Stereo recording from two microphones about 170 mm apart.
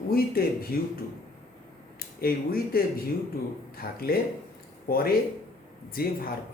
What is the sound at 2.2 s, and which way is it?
Speech, 60° left (ahead or behind).